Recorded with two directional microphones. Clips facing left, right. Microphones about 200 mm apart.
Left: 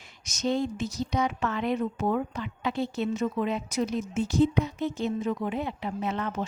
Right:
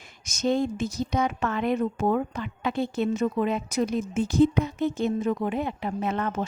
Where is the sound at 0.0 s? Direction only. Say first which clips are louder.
Right 3 dB; 50° right (ahead or behind).